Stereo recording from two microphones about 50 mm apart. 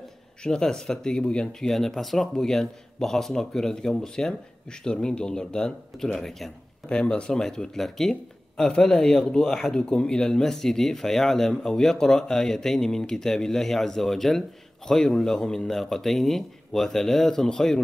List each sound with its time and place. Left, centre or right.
0.4 s speech: centre
1.7 s speech: centre
6.9 s speech: centre